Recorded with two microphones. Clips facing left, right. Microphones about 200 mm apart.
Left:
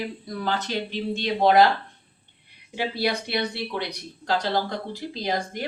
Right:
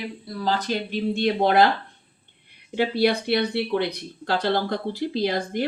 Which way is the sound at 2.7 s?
55° right (ahead or behind).